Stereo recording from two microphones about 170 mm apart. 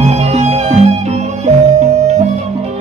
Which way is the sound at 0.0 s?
40° right (ahead or behind).